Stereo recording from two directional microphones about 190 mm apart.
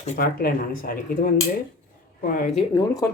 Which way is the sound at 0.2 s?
50° left (ahead or behind).